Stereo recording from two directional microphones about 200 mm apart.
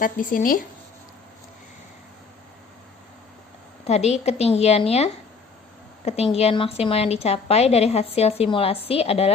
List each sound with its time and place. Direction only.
0.0 s speech: 45° left (ahead or behind)
3.8 s a woman's voice: 35° left (ahead or behind)
6.3 s a woman's voice: 30° left (ahead or behind)